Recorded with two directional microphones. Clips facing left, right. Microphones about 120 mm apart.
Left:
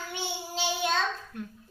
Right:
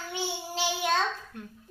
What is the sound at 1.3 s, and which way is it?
Speech, 25° right (ahead or behind).